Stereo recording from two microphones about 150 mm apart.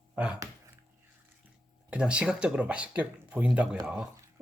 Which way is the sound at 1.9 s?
5° right (ahead or behind).